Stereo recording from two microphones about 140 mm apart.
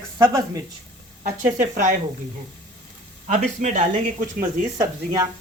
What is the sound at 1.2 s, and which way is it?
Speech, 70° right (ahead or behind).